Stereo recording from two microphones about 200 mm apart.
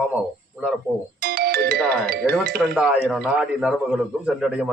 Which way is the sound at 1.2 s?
50° right (ahead or behind).